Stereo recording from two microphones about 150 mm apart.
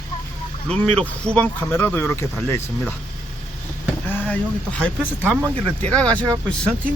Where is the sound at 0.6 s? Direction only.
5° left (ahead or behind).